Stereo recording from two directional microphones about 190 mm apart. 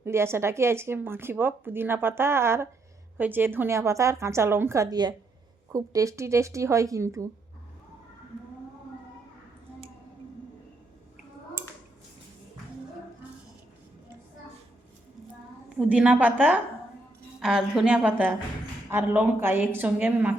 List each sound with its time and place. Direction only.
0.0 s speech: 15° right (ahead or behind)
15.7 s speech: 5° right (ahead or behind)